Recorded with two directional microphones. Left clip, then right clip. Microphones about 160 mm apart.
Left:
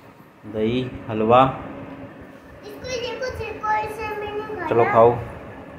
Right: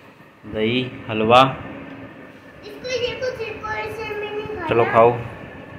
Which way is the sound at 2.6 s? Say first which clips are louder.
Right 4 dB; 20° left (ahead or behind).